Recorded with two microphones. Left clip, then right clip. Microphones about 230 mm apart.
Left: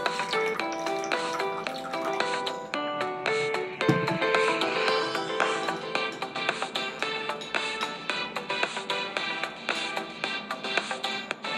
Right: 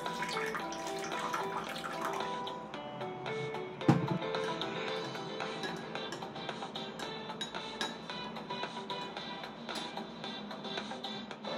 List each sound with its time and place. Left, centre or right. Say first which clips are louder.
3.3 s music: left 12 dB; left